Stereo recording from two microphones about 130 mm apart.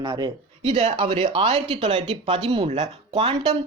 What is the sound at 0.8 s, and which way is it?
Speech, 50° right (ahead or behind).